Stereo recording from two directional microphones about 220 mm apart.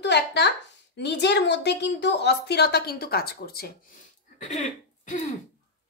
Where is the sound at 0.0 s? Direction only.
50° left (ahead or behind).